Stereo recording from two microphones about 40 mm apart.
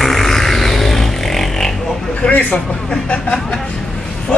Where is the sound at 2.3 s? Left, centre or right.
Left.